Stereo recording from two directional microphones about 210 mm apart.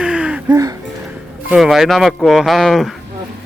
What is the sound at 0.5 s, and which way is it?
Music, 15° right (ahead or behind).